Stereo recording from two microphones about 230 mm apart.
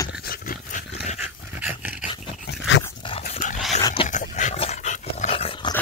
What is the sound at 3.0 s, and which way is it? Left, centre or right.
Dog, left.